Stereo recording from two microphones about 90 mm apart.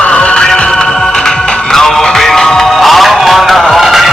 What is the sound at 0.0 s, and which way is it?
Music, 15° left (ahead or behind).